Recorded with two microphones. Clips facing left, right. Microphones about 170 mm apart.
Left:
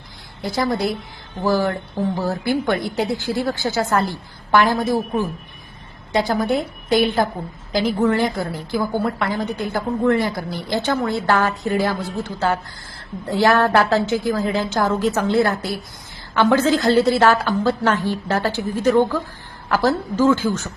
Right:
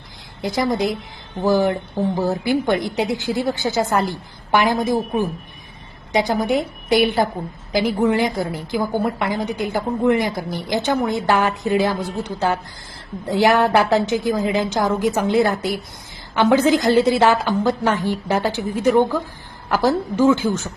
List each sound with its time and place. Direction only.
0.4 s a woman's voice: 20° right (ahead or behind)